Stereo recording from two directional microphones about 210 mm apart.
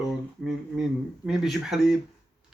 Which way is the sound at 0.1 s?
Centre (ahead or behind).